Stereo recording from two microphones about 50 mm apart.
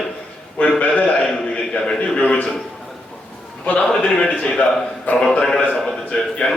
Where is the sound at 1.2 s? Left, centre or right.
Centre.